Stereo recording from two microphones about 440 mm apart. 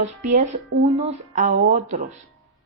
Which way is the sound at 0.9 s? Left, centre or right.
Centre.